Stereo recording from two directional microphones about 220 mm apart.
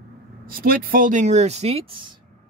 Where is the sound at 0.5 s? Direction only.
40° right (ahead or behind).